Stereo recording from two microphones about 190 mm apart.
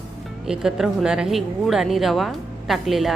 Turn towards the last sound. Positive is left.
turn(degrees=0)  # may be behind; listen again after turning